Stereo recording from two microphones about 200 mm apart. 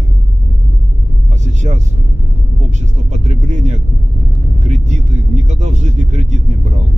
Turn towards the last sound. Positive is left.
turn(degrees=-35)  # may be behind; listen again after turning